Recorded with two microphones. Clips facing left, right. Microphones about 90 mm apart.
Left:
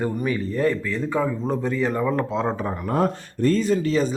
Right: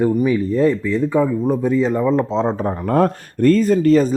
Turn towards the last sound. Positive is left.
turn(degrees=-45)  # may be behind; listen again after turning